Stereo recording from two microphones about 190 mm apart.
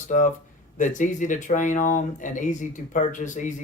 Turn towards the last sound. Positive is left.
turn(degrees=40)  # may be behind; listen again after turning